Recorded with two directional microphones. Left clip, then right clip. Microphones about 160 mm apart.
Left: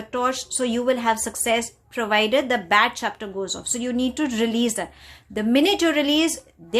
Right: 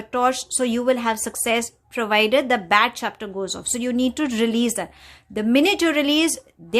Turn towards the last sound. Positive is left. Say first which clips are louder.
# right 2 dB
turn(degrees=-35)  # may be behind; listen again after turning